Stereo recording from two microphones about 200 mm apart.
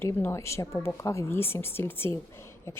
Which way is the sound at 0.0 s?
10° left (ahead or behind).